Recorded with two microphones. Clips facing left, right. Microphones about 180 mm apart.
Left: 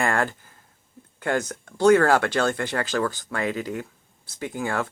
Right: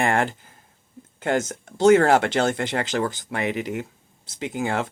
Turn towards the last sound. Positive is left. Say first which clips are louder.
# right 2 dB
turn(degrees=-20)  # may be behind; listen again after turning